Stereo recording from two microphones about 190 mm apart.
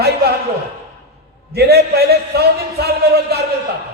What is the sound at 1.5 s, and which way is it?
A man's voice, 60° right (ahead or behind).